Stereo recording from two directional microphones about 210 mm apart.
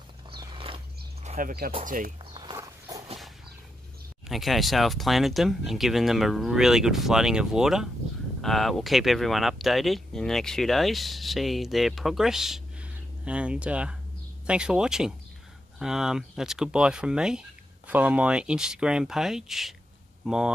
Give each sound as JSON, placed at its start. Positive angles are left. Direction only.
{"t": 0.4, "sound": "biting", "side_deg": -25}
{"t": 1.2, "sound": "bird", "side_deg": -35}
{"t": 1.9, "sound": "speech", "side_deg": -40}
{"t": 2.3, "sound": "walk", "side_deg": -20}
{"t": 4.3, "sound": "speech", "side_deg": 0}